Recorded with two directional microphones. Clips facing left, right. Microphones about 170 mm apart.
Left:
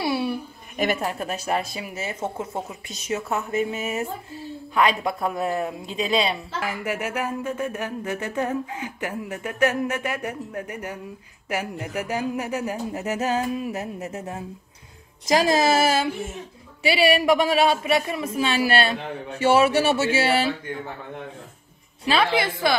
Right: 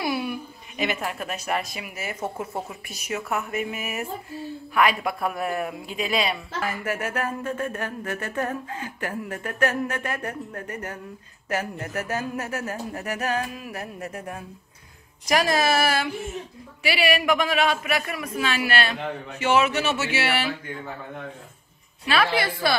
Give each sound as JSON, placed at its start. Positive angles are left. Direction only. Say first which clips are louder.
{"t": 0.0, "sound": "a sound", "louder": "left 3 dB", "side_deg": 30}
{"t": 0.7, "sound": "a man's voice", "louder": "left 3 dB", "side_deg": 40}
{"t": 6.6, "sound": "a man's voice", "louder": "even", "side_deg": 15}
{"t": 22.0, "sound": "a man's voice", "louder": "left 2 dB", "side_deg": 30}